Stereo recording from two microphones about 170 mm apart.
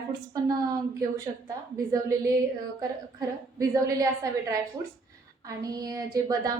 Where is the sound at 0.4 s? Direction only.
20° right (ahead or behind).